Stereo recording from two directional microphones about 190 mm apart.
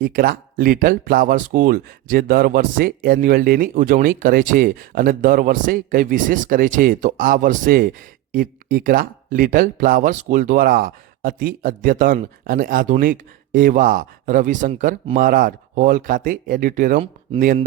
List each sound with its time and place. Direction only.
0.0 s speech: 50° right (ahead or behind)